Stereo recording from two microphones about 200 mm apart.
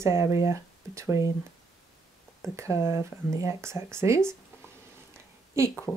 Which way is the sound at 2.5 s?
15° right (ahead or behind).